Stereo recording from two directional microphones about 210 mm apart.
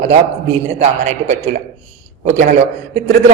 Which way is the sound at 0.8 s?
30° right (ahead or behind).